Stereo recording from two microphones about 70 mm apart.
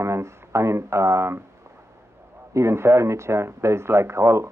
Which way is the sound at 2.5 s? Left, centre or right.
Right.